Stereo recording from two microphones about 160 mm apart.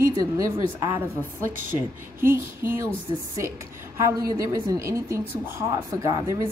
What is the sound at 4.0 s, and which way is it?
A woman's voice, 20° right (ahead or behind).